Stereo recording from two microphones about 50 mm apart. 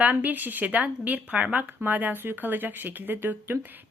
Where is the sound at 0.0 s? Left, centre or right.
Right.